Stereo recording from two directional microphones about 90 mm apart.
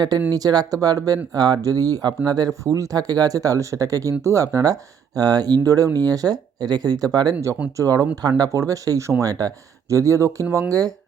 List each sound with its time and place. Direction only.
0.3 s speech: 45° right (ahead or behind)